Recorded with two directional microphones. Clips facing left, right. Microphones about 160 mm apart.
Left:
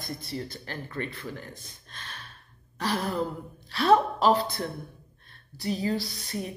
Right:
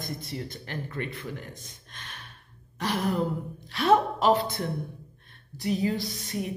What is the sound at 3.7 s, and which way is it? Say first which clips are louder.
Speech: left 1 dB; 20° right (ahead or behind).